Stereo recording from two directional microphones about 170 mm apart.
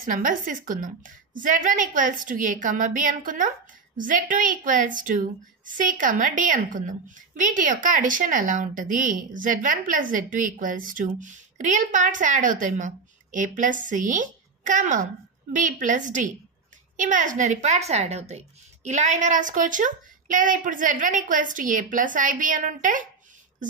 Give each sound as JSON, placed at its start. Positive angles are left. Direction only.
{"t": 0.0, "sound": "a woman's voice", "side_deg": -55}